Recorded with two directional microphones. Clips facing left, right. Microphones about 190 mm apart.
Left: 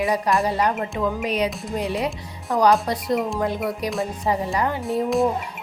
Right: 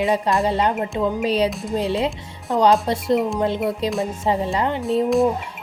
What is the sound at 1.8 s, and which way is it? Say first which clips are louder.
Speech: right 3 dB; 30° right (ahead or behind).